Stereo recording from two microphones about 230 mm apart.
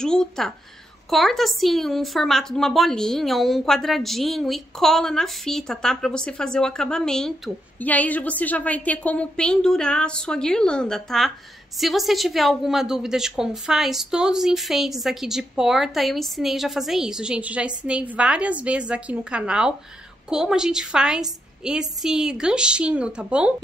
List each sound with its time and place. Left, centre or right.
0.0 s a woman's voice: centre